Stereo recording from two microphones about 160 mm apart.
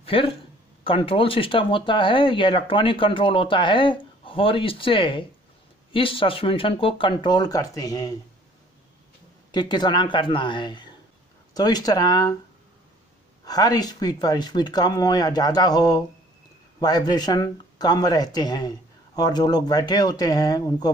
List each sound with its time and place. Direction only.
0.0 s speech: 35° left (ahead or behind)
9.5 s speech: 25° left (ahead or behind)
13.5 s speech: 25° left (ahead or behind)